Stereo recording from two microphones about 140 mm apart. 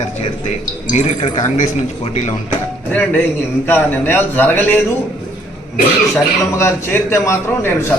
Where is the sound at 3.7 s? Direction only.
15° left (ahead or behind).